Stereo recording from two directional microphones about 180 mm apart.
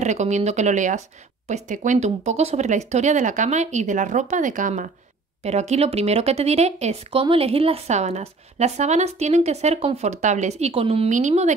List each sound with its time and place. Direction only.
0.0 s speech: 40° right (ahead or behind)